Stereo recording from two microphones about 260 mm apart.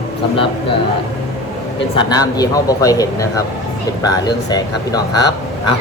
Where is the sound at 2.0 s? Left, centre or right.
Centre.